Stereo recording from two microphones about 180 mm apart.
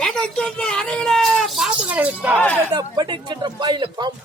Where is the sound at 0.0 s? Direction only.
5° left (ahead or behind).